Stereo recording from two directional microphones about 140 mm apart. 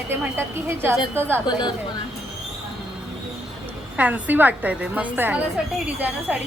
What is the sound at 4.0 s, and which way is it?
A woman's voice, 10° right (ahead or behind).